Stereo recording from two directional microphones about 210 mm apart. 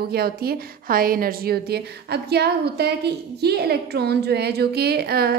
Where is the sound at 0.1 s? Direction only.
45° right (ahead or behind).